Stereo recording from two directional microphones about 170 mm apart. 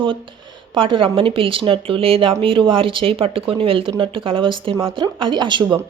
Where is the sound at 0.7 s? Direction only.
30° right (ahead or behind).